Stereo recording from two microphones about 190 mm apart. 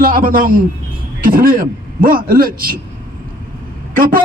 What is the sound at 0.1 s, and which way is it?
Speech, 45° right (ahead or behind).